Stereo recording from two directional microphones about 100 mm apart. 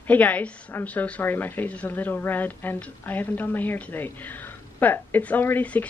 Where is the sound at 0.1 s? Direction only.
15° left (ahead or behind).